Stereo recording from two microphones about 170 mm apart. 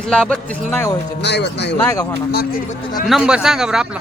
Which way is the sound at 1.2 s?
90° left.